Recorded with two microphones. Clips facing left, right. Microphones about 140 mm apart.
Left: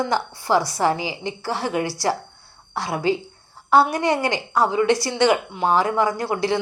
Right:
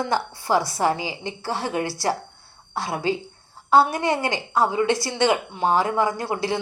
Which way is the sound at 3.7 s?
25° right (ahead or behind).